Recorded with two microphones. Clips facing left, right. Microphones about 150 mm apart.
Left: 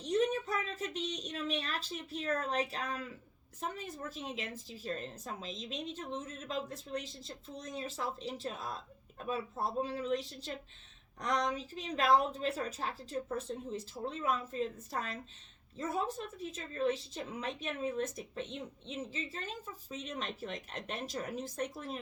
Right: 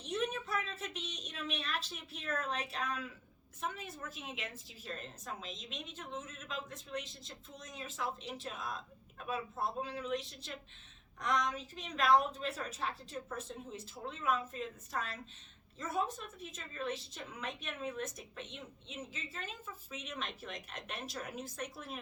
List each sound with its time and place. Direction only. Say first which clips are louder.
0.0 s a woman's voice: left 6 dB; 40° left (ahead or behind)